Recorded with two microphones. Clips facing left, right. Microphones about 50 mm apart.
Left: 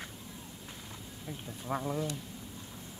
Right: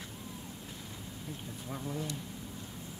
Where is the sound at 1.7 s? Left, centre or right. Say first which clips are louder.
Left 7 dB; left.